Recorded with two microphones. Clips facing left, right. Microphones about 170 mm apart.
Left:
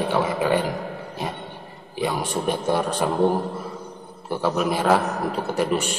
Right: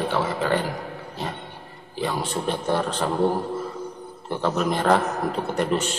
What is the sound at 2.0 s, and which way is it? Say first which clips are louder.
A man's voice: left 2 dB; 15° left (ahead or behind).